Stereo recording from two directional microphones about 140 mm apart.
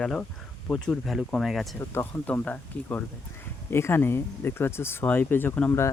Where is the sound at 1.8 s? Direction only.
15° left (ahead or behind).